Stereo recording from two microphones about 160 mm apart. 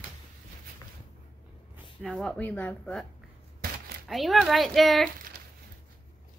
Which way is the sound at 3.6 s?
65° right (ahead or behind).